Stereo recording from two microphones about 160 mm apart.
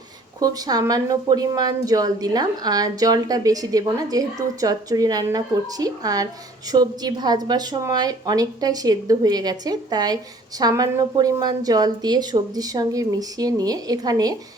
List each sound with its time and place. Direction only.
0.3 s a woman's voice: 25° right (ahead or behind)